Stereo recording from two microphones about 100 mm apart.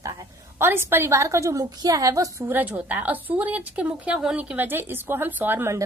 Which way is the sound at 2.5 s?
15° right (ahead or behind).